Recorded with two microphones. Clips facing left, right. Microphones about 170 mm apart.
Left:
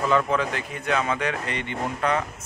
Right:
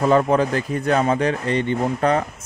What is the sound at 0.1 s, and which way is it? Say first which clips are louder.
Speech: right 6 dB; 40° right (ahead or behind).